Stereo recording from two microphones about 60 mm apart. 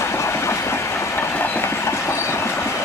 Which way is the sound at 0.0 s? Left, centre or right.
Left.